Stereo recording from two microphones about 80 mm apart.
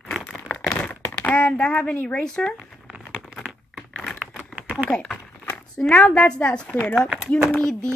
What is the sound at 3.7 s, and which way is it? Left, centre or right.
Typing, centre.